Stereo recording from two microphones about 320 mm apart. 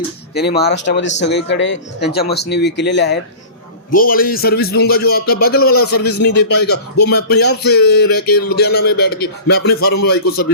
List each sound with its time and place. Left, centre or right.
0.3 s speech: left
6.1 s speech: left
6.7 s speech: left
9.0 s speech: left
9.5 s speech: left